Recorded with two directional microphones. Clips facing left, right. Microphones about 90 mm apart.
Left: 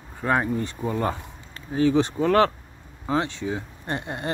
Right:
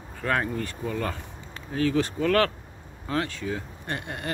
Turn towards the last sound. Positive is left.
turn(degrees=25)  # may be behind; listen again after turning